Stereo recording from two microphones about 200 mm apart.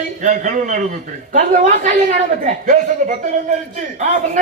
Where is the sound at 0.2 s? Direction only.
40° right (ahead or behind).